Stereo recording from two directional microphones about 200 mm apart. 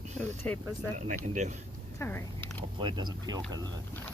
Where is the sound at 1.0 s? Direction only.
40° right (ahead or behind).